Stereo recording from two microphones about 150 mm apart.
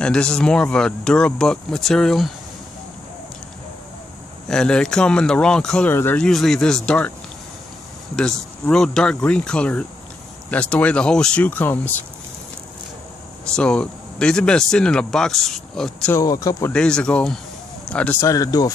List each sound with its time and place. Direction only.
0.0 s speech: 5° left (ahead or behind)
4.5 s speech: 5° left (ahead or behind)
8.2 s speech: 5° left (ahead or behind)
13.5 s speech: 5° left (ahead or behind)
16.2 s speech: 20° left (ahead or behind)
16.7 s speech: 5° left (ahead or behind)
18.2 s speech: 20° left (ahead or behind)